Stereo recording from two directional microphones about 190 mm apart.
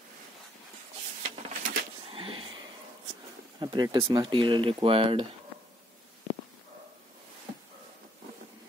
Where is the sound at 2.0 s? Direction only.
30° right (ahead or behind).